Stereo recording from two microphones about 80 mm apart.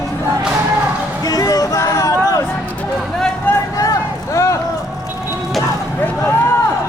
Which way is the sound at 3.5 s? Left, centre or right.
Left.